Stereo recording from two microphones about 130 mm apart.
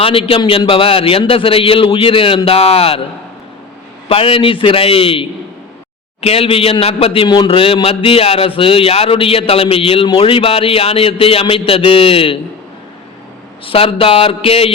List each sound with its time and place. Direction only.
0.0 s a man's voice: 45° left (ahead or behind)
4.1 s a man's voice: 45° left (ahead or behind)
13.7 s a man's voice: 45° left (ahead or behind)